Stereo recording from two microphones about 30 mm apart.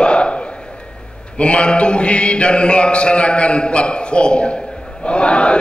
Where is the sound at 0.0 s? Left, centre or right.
Left.